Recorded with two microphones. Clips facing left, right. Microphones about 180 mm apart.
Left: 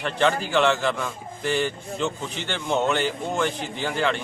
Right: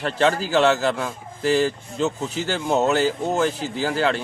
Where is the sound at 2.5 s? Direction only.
40° right (ahead or behind).